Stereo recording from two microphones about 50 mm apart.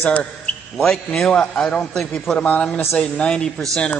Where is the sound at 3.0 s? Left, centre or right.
Centre.